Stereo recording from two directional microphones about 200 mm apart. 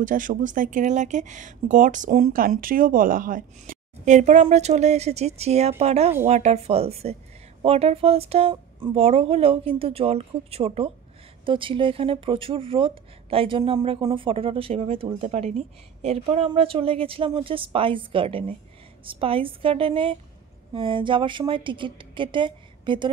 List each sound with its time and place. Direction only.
0.0 s speech: 40° right (ahead or behind); by 23.1 s 25° right (ahead or behind)